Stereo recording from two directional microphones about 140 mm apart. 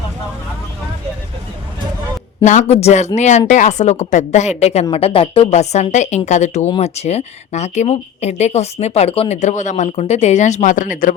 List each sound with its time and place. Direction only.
2.4 s a woman's voice: 60° left (ahead or behind); by 11.1 s 75° left (ahead or behind)